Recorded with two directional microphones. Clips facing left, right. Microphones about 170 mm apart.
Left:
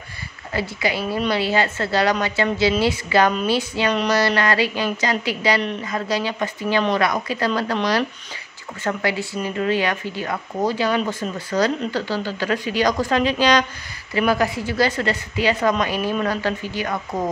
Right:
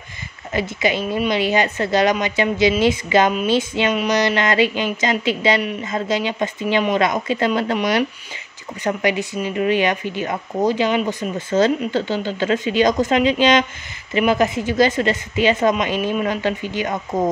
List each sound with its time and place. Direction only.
0.5 s a woman's voice: 20° right (ahead or behind)